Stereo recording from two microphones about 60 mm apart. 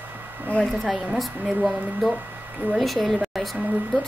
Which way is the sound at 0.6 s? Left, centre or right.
Centre.